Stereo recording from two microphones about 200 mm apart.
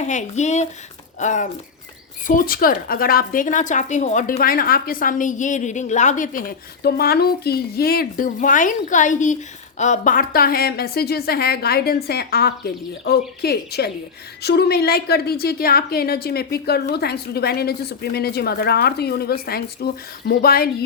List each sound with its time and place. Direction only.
0.0 s a woman's voice: 35° left (ahead or behind)
6.8 s speech: 50° left (ahead or behind)